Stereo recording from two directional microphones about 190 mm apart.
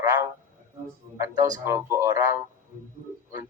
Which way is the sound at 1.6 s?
15° right (ahead or behind).